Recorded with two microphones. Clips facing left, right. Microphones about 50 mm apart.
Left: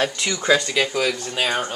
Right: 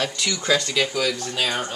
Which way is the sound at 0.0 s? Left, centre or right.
Centre.